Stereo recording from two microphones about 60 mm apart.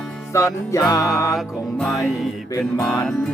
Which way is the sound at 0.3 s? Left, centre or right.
Left.